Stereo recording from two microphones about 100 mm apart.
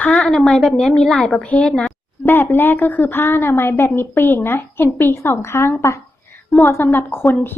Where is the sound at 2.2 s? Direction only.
20° left (ahead or behind).